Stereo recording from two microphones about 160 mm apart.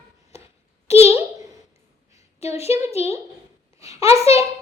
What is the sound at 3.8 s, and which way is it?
Speech, 20° right (ahead or behind).